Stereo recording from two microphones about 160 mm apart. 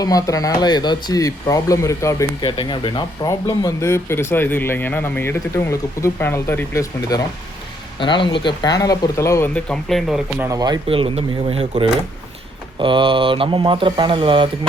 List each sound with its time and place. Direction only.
0.0 s speech: 20° left (ahead or behind)
3.2 s speech: 20° left (ahead or behind)
7.9 s speech: 30° left (ahead or behind); by 10.2 s 5° left (ahead or behind)
10.3 s speech: 10° right (ahead or behind)
10.6 s speech: 30° right (ahead or behind)